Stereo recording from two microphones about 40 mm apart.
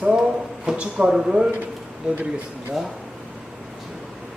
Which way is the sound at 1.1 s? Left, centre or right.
Centre.